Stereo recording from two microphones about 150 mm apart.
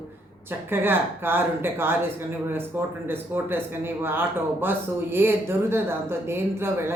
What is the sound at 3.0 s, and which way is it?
Speech, 15° right (ahead or behind).